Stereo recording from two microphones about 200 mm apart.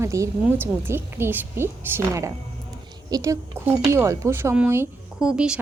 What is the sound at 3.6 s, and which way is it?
Speech, 10° right (ahead or behind).